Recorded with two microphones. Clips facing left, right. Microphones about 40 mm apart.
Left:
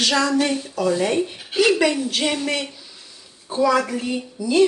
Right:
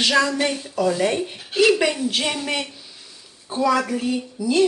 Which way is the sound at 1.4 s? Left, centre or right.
Centre.